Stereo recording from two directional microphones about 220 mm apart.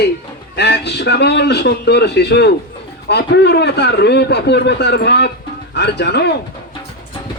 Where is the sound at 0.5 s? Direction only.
50° left (ahead or behind).